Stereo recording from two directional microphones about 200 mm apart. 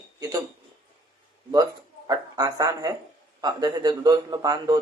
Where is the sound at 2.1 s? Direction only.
20° right (ahead or behind).